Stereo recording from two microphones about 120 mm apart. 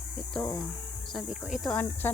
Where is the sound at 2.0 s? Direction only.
15° left (ahead or behind).